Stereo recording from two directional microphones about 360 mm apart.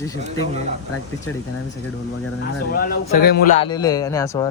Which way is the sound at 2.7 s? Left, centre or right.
Left.